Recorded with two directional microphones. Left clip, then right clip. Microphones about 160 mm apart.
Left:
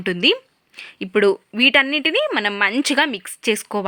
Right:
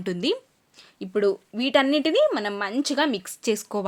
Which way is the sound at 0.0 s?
15° left (ahead or behind).